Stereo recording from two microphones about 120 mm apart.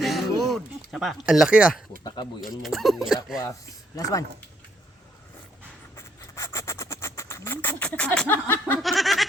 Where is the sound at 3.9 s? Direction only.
30° left (ahead or behind).